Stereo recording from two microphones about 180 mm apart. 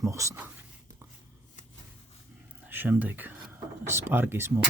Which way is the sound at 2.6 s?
10° right (ahead or behind).